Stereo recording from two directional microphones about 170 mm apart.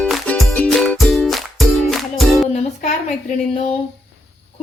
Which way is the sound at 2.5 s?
45° left (ahead or behind).